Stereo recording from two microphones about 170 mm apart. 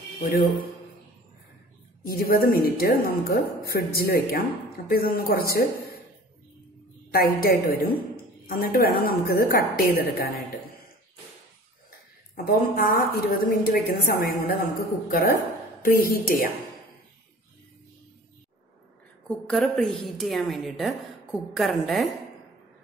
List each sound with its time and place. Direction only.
0.2 s a woman's voice: 60° left (ahead or behind)
2.0 s a woman's voice: 60° left (ahead or behind)
7.1 s a woman's voice: 60° left (ahead or behind)
12.4 s a woman's voice: 60° left (ahead or behind)
19.2 s a woman's voice: 5° left (ahead or behind)